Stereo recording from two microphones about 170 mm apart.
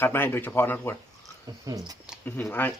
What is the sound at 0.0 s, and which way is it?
Speech, 10° left (ahead or behind).